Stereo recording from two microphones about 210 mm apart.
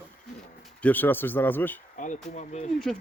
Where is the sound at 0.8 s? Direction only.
10° left (ahead or behind).